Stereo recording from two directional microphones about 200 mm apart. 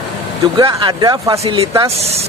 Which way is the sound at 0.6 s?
25° right (ahead or behind).